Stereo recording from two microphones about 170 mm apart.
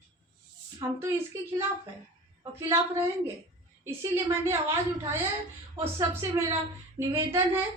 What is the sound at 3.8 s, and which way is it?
Speech, 15° right (ahead or behind).